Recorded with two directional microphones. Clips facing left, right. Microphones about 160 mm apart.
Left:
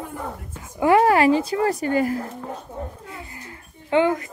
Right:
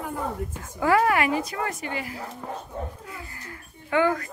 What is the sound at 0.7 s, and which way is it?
Speech, 25° left (ahead or behind).